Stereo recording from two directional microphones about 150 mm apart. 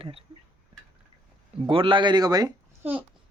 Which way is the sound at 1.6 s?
35° right (ahead or behind).